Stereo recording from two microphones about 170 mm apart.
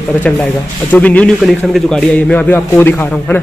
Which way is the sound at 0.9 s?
10° left (ahead or behind).